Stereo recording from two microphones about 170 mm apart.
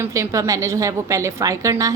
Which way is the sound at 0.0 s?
20° right (ahead or behind).